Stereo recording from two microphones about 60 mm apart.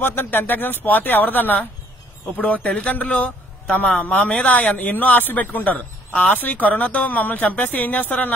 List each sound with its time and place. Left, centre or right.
0.0 s a man's voice: left